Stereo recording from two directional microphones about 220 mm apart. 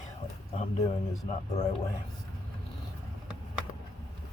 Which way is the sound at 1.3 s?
30° left (ahead or behind).